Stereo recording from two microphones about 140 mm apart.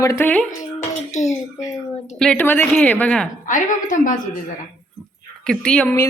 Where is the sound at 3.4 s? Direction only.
70° left (ahead or behind).